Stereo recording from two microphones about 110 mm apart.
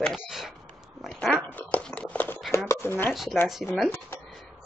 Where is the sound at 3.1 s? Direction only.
Centre (ahead or behind).